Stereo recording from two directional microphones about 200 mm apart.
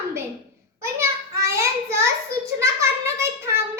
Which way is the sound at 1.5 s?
15° right (ahead or behind).